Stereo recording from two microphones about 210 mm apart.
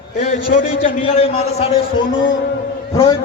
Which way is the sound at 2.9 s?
25° left (ahead or behind).